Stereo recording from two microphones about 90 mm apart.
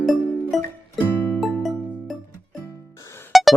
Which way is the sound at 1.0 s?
25° left (ahead or behind).